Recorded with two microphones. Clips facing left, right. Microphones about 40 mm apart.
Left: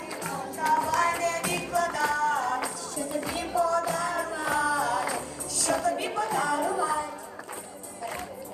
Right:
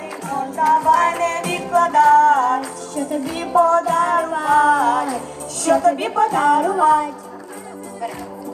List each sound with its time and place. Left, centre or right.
0.2 s music: right
5.5 s a woman's voice: right